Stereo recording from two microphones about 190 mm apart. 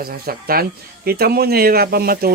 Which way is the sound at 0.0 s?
50° right (ahead or behind).